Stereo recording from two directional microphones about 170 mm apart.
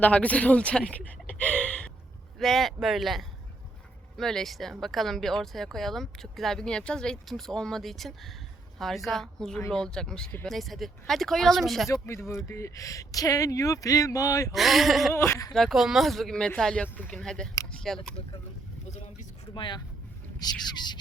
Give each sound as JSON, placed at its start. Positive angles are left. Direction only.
{"t": 0.0, "sound": "speech", "side_deg": 10}
{"t": 12.0, "sound": "speech", "side_deg": 15}
{"t": 14.5, "sound": "speech", "side_deg": 0}
{"t": 15.1, "sound": "speech", "side_deg": 15}
{"t": 15.5, "sound": "speech", "side_deg": 0}
{"t": 19.5, "sound": "speech", "side_deg": 25}